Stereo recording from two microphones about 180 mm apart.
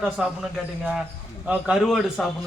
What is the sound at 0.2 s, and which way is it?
Speech, 5° right (ahead or behind).